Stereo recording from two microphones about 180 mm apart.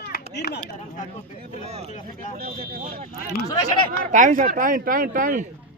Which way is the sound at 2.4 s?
55° right (ahead or behind).